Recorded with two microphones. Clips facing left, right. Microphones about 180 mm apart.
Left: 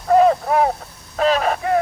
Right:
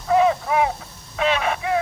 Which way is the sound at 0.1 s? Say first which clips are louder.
Left 4 dB; 45° left (ahead or behind).